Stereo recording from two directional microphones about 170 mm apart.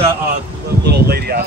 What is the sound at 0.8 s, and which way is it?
Speech, 70° right (ahead or behind).